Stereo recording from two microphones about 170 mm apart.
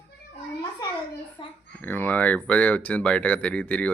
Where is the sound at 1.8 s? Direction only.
10° left (ahead or behind).